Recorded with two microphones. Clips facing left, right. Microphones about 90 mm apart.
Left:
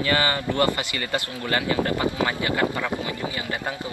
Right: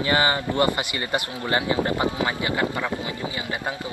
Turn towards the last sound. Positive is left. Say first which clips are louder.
# even
turn(degrees=-20)  # may be behind; listen again after turning